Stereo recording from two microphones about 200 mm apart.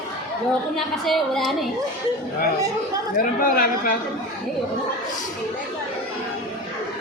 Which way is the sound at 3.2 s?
45° left (ahead or behind).